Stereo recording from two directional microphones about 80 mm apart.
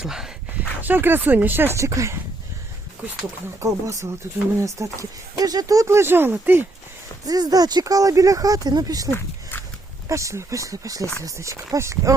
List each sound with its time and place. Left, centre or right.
0.0 s speech: centre
0.8 s speech: right
1.8 s speech: right
3.6 s speech: right
7.3 s speech: right
9.0 s a sound: left
10.1 s speech: right